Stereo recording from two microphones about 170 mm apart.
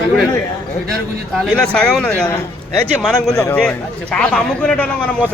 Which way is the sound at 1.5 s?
5° left (ahead or behind).